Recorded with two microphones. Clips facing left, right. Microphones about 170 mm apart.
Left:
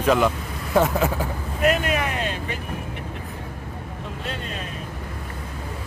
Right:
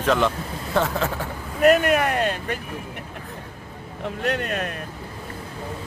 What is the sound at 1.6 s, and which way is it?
Vehicle, 50° right (ahead or behind).